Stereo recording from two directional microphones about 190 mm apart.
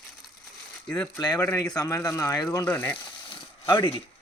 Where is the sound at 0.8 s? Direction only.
5° left (ahead or behind).